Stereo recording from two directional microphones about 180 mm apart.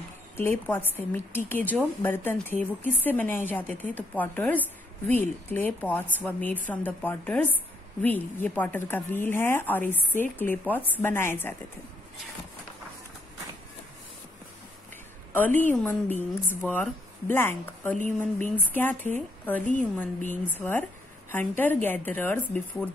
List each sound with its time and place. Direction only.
0.4 s a woman's voice: 10° left (ahead or behind)
15.3 s a woman's voice: 10° left (ahead or behind)